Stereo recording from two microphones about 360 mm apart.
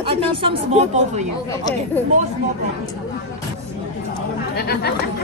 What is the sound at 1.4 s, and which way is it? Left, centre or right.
Speech, centre.